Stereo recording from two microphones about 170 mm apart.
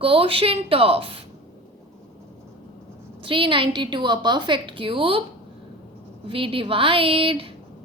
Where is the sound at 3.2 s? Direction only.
30° right (ahead or behind).